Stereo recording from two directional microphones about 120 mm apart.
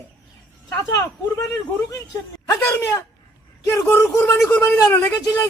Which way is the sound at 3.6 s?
25° left (ahead or behind).